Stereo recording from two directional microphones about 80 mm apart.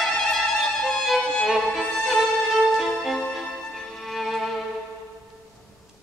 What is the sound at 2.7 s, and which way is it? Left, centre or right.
Music, centre.